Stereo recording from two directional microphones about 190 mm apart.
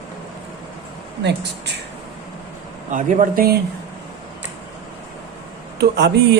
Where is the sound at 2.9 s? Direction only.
45° right (ahead or behind).